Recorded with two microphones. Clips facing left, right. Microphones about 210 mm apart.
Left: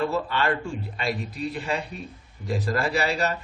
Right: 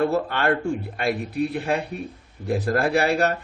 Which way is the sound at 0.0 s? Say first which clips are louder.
Right 3 dB; 55° right (ahead or behind).